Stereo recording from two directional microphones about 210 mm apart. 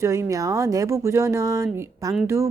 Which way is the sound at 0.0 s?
15° right (ahead or behind).